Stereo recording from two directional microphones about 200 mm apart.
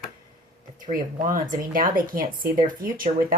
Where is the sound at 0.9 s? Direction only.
45° right (ahead or behind).